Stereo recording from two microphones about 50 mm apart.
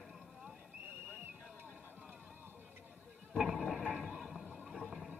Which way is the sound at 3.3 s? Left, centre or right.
Centre.